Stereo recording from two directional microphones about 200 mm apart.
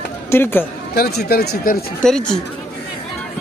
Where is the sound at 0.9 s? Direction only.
50° left (ahead or behind).